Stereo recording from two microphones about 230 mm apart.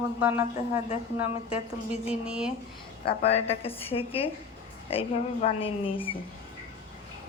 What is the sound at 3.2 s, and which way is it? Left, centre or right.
A woman's voice, left.